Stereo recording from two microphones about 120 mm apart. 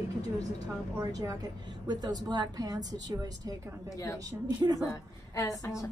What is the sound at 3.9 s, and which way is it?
A woman's voice, 25° left (ahead or behind).